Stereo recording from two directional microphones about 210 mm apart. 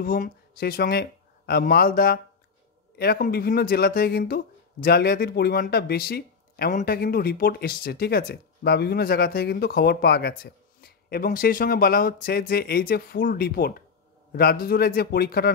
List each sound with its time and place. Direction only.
0.0 s speech: 45° left (ahead or behind)